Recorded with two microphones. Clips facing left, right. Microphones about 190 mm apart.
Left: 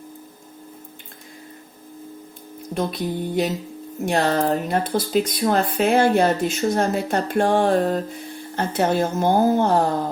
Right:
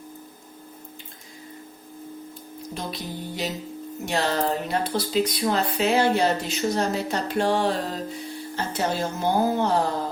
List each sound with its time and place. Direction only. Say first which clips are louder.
2.7 s speech: left 9 dB; 55° left (ahead or behind)